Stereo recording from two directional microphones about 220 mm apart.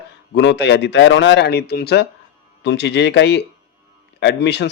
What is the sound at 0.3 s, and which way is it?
Speech, 55° left (ahead or behind).